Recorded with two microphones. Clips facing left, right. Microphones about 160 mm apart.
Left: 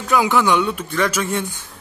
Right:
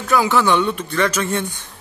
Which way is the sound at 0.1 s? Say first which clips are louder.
Even; 15° left (ahead or behind).